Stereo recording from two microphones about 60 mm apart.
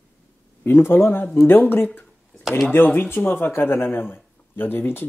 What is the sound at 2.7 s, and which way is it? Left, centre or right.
Speech, left.